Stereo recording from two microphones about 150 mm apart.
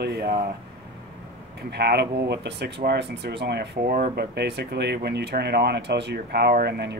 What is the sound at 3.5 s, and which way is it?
Speech, 75° right (ahead or behind).